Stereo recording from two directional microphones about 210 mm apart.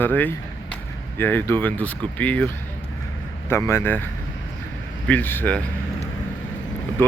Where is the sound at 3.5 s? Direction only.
10° left (ahead or behind).